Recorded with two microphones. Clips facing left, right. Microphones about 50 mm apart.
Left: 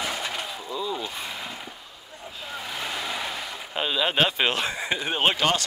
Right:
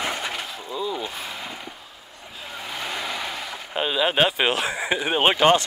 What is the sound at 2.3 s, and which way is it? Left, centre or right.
Vehicle, centre.